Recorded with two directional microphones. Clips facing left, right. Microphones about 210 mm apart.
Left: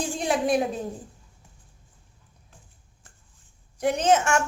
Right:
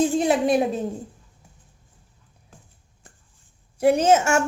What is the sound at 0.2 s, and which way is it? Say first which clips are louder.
Speech: right 4 dB; 5° right (ahead or behind).